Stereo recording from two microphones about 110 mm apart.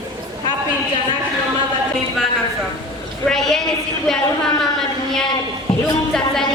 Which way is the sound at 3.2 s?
Centre (ahead or behind).